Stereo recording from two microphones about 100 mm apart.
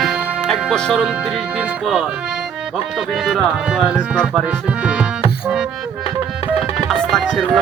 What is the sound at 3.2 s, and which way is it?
Music, centre (ahead or behind).